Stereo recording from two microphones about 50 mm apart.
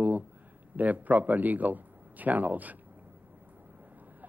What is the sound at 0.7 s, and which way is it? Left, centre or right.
A man's voice, right.